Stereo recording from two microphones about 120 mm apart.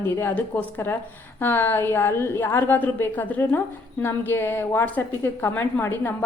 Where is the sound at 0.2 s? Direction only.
15° left (ahead or behind).